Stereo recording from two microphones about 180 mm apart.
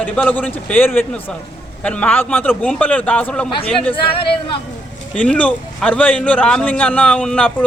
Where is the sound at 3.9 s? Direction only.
30° left (ahead or behind).